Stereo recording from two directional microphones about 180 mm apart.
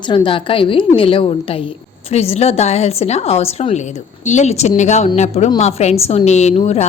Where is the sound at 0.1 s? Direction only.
30° left (ahead or behind).